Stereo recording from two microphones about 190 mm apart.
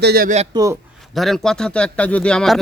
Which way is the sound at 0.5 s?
25° right (ahead or behind).